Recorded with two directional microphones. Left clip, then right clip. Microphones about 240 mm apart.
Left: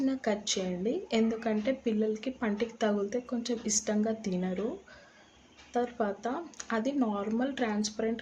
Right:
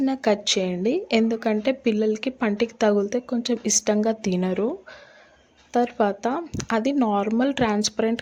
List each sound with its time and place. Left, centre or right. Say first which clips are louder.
0.0 s a woman's voice: right 9 dB; right
5.7 s a woman's voice: right 10 dB; right